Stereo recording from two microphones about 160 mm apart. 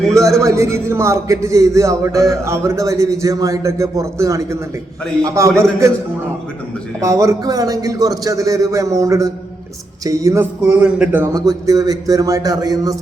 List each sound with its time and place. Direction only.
0.1 s a man's voice: 20° right (ahead or behind)
7.0 s a man's voice: 20° right (ahead or behind)
10.7 s a man's voice: 5° right (ahead or behind); by 13.0 s 20° right (ahead or behind)